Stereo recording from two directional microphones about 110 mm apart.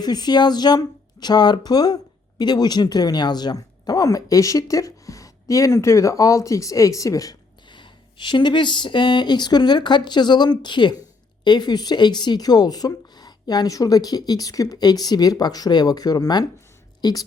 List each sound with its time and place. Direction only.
0.0 s speech: 40° left (ahead or behind)